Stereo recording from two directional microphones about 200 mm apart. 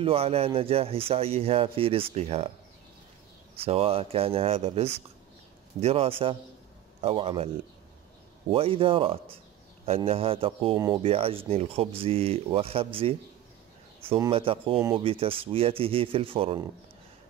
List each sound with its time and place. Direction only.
0.0 s speech: 30° right (ahead or behind)
3.5 s speech: 30° right (ahead or behind)
8.5 s speech: 25° right (ahead or behind)